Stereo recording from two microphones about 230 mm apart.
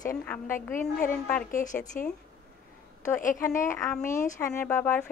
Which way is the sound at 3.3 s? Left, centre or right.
Centre.